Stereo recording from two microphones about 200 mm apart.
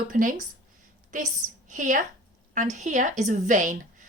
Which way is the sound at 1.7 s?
40° right (ahead or behind).